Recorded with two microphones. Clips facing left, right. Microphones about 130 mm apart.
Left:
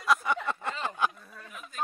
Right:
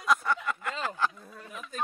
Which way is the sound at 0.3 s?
25° left (ahead or behind).